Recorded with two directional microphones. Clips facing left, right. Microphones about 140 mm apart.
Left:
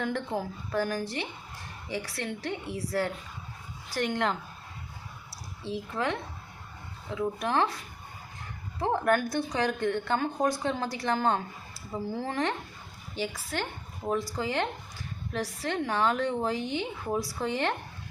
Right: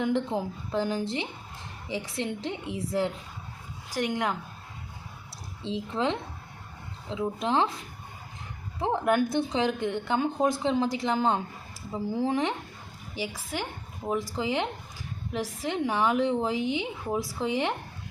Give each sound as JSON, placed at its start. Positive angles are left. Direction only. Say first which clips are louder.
{"t": 0.0, "sound": "a woman's voice", "louder": "right 4 dB", "side_deg": -20}
{"t": 5.6, "sound": "a woman's voice", "louder": "right 3 dB", "side_deg": -20}
{"t": 9.0, "sound": "a woman's voice", "louder": "right 4 dB", "side_deg": -20}